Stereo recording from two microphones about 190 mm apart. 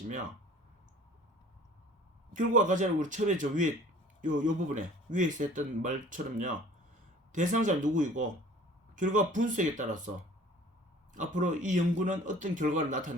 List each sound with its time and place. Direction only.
2.3 s speech: 40° right (ahead or behind)
11.1 s speech: 40° right (ahead or behind)